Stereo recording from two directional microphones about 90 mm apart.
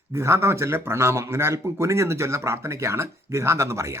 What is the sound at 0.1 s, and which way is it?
Speech, 30° right (ahead or behind).